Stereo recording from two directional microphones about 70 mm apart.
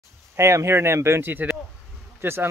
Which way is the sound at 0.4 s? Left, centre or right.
Right.